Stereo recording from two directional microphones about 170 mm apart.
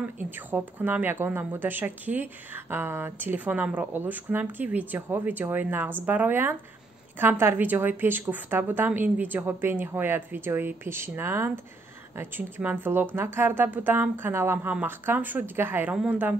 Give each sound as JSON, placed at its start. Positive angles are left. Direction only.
{"t": 0.2, "sound": "a woman's voice", "side_deg": -10}